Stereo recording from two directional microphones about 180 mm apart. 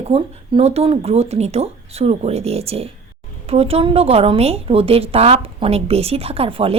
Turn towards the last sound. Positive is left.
turn(degrees=-30)  # may be behind; listen again after turning